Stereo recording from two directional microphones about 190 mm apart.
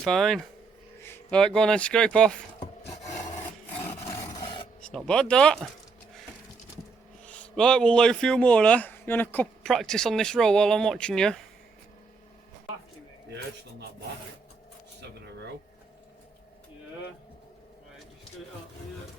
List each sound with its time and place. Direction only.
0.0 s speech: centre (ahead or behind)
4.3 s filing: 20° left (ahead or behind)
4.8 s speech: 5° left (ahead or behind)
7.3 s speech: 5° left (ahead or behind)